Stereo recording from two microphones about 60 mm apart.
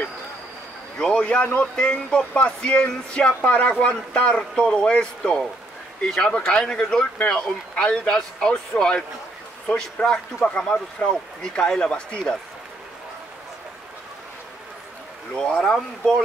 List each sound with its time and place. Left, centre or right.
0.9 s speech: centre
15.3 s speech: centre